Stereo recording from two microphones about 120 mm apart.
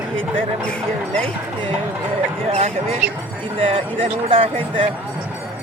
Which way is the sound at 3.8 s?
50° right (ahead or behind).